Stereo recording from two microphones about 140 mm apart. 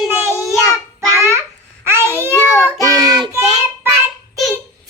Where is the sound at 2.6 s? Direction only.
25° right (ahead or behind).